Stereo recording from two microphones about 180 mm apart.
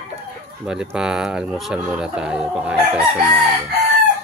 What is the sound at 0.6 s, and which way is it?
Speech, 5° right (ahead or behind).